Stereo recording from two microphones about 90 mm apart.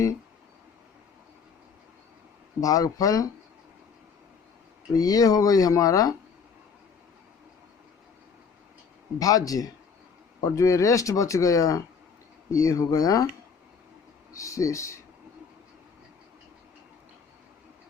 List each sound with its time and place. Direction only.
2.6 s speech: 40° left (ahead or behind)
4.9 s speech: 45° left (ahead or behind)
9.1 s speech: 40° left (ahead or behind)
14.3 s speech: 35° left (ahead or behind)